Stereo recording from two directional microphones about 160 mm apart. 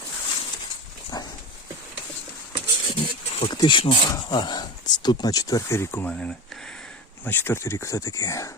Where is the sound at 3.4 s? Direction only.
30° left (ahead or behind).